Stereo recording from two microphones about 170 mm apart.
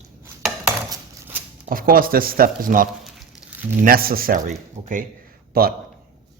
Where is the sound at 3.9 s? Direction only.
60° right (ahead or behind).